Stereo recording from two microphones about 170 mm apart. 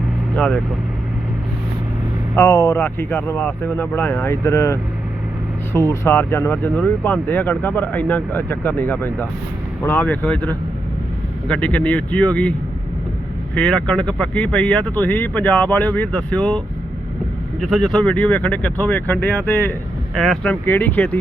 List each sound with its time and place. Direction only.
0.3 s speech: 5° left (ahead or behind)
2.4 s speech: 25° left (ahead or behind)
2.7 s speech: 10° left (ahead or behind)
17.7 s speech: 5° left (ahead or behind)